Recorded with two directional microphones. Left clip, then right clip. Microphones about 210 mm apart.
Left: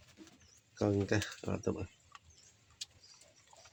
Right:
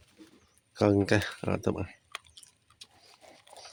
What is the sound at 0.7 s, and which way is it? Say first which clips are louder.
Speech: right 8 dB; 35° right (ahead or behind).